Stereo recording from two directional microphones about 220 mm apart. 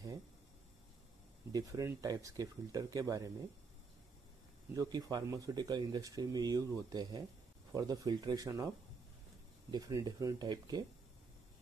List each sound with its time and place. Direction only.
1.5 s speech: 15° right (ahead or behind)
4.7 s speech: 15° right (ahead or behind)
9.7 s speech: 15° right (ahead or behind)